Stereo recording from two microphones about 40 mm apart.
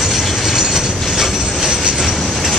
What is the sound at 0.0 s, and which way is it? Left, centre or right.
Train, centre.